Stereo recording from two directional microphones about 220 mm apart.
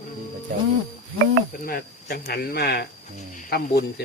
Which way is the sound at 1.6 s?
40° left (ahead or behind).